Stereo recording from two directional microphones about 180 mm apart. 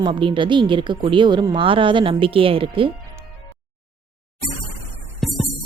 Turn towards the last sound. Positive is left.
turn(degrees=0)  # may be behind; listen again after turning